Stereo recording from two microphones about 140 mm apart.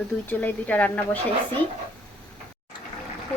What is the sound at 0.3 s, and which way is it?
Speech, 10° left (ahead or behind).